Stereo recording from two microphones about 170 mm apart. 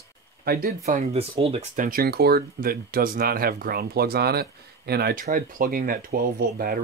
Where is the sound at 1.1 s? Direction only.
35° right (ahead or behind).